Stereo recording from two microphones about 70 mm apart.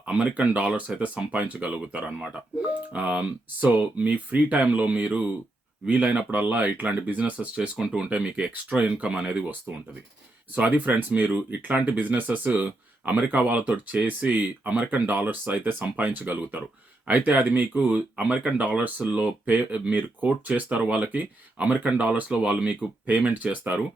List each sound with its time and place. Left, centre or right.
0.0 s speech: centre